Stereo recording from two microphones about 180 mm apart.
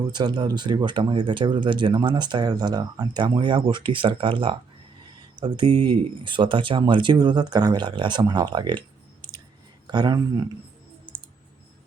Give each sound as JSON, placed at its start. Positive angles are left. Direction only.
{"t": 0.1, "sound": "speech", "side_deg": -25}
{"t": 9.8, "sound": "speech", "side_deg": -25}